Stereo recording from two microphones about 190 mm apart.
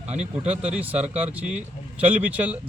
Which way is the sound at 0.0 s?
35° right (ahead or behind).